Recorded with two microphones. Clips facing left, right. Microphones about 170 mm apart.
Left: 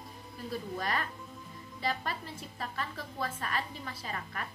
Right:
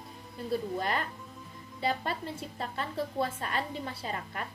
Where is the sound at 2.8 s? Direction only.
25° right (ahead or behind).